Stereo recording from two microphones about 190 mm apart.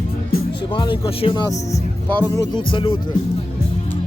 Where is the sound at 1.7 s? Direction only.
10° left (ahead or behind).